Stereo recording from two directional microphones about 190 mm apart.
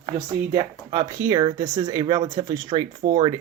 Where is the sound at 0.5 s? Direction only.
20° right (ahead or behind).